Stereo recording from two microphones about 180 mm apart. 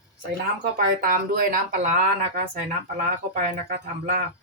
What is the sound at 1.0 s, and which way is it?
Speech, 50° right (ahead or behind).